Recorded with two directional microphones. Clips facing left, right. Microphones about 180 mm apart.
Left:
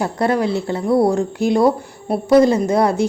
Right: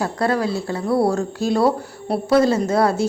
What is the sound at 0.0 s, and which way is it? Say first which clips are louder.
A woman's voice: left 2 dB; 20° left (ahead or behind).